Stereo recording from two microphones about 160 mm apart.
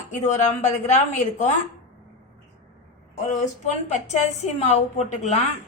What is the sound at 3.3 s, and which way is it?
Speech, 45° left (ahead or behind).